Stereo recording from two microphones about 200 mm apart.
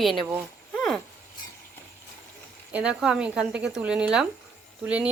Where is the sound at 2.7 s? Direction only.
5° right (ahead or behind).